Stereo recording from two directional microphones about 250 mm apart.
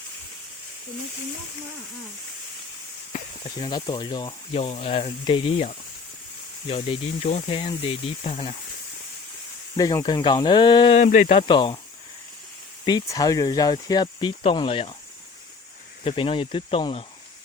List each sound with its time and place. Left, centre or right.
3.6 s speech: centre
9.7 s speech: centre
12.8 s speech: centre
16.0 s speech: left